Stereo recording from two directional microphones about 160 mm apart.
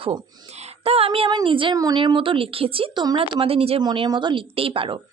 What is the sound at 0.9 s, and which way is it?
Speech, 40° right (ahead or behind).